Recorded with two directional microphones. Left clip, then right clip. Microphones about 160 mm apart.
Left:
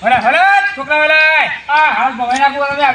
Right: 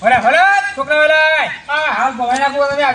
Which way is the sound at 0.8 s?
15° right (ahead or behind).